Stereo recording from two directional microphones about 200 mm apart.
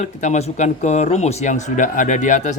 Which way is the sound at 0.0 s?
35° left (ahead or behind).